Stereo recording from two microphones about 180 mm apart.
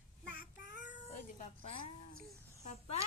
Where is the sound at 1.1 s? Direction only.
35° left (ahead or behind).